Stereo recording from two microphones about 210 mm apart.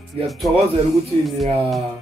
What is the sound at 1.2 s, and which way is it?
Speech, centre (ahead or behind).